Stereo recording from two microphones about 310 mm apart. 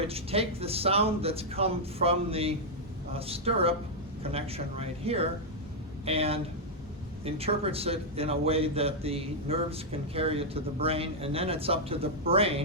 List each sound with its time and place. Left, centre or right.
0.1 s a man's voice: centre